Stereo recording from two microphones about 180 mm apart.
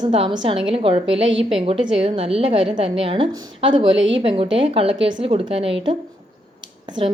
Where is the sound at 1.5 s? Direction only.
30° right (ahead or behind).